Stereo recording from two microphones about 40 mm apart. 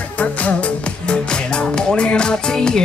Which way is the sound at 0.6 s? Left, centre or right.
Left.